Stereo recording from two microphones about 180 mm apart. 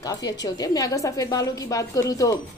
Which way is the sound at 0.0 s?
20° left (ahead or behind).